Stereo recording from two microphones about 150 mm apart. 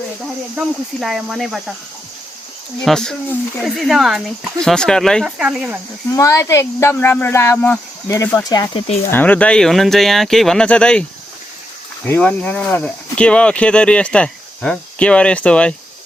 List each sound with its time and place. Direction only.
0.5 s speech: centre (ahead or behind)
2.8 s speech: 5° left (ahead or behind)
5.4 s speech: 5° right (ahead or behind)
6.1 s speech: 20° left (ahead or behind)
9.0 s speech: 10° left (ahead or behind)
12.0 s speech: 10° left (ahead or behind)